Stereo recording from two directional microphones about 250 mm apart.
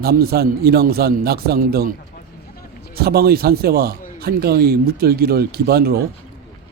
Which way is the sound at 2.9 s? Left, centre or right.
Right.